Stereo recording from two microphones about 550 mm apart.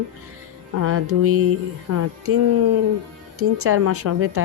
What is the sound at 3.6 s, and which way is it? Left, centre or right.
Speech, right.